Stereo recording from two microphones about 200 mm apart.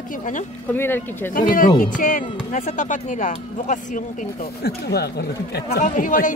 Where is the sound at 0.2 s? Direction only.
40° left (ahead or behind).